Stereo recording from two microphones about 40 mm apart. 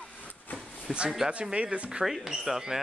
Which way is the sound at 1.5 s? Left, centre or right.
Right.